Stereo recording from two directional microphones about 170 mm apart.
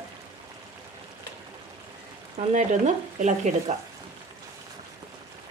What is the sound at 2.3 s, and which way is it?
Speech, 45° right (ahead or behind).